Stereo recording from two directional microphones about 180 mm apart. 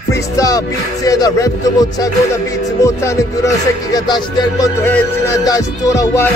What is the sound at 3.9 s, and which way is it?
Speech, 20° left (ahead or behind).